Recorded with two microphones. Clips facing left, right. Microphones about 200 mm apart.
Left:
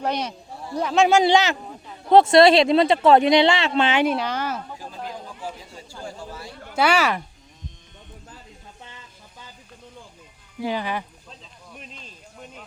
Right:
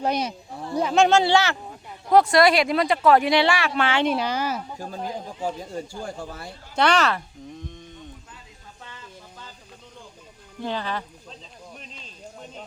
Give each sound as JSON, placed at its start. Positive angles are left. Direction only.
{"t": 0.0, "sound": "speech", "side_deg": -10}
{"t": 1.1, "sound": "speech", "side_deg": 15}
{"t": 4.0, "sound": "speech", "side_deg": 0}
{"t": 5.4, "sound": "speech", "side_deg": -50}
{"t": 6.7, "sound": "speech", "side_deg": 10}
{"t": 10.6, "sound": "speech", "side_deg": 10}